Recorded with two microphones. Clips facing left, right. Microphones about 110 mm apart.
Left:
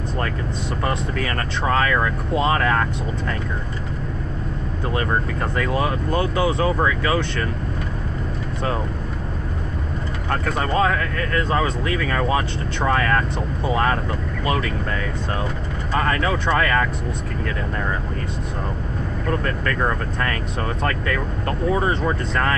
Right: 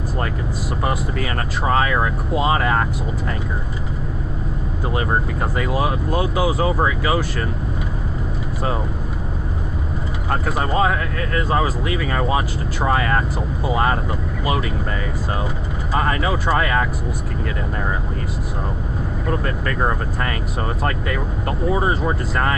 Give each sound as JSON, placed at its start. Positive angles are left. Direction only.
{"t": 0.8, "sound": "speech", "side_deg": -10}
{"t": 4.8, "sound": "speech", "side_deg": -10}
{"t": 10.3, "sound": "speech", "side_deg": -5}
{"t": 15.9, "sound": "speech", "side_deg": -10}
{"t": 19.2, "sound": "speech", "side_deg": -10}